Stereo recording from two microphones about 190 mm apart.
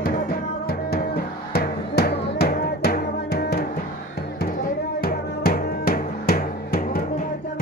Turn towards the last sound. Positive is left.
turn(degrees=50)  # may be behind; listen again after turning